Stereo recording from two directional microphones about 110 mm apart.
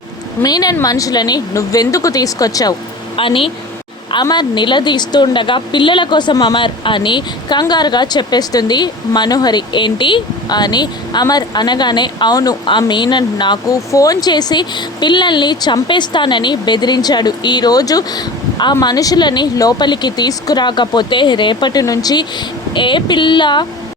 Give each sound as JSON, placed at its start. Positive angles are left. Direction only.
{"t": 0.4, "sound": "speech", "side_deg": 35}
{"t": 3.2, "sound": "speech", "side_deg": 50}
{"t": 4.1, "sound": "speech", "side_deg": 40}
{"t": 12.6, "sound": "speech", "side_deg": 45}
{"t": 13.9, "sound": "speech", "side_deg": 30}